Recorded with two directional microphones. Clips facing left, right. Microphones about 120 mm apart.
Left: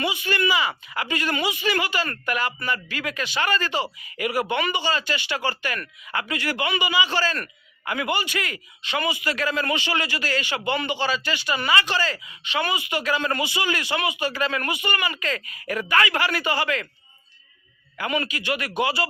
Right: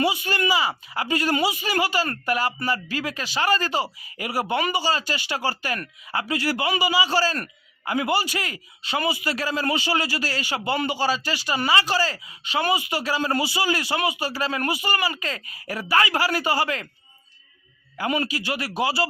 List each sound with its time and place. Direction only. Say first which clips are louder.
0.0 s a man's voice: right 1 dB; 40° right (ahead or behind)
17.9 s a man's voice: right 2 dB; 35° right (ahead or behind)